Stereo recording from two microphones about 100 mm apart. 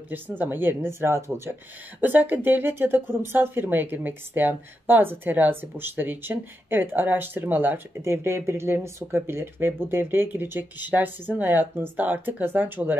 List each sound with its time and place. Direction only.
0.1 s speech: 20° right (ahead or behind)